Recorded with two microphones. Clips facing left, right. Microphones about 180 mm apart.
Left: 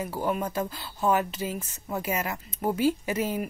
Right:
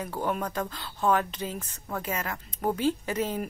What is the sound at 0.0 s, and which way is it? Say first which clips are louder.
Speech: left 2 dB; 5° left (ahead or behind).